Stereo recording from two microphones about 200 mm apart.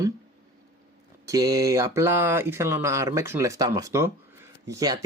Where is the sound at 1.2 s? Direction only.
15° right (ahead or behind).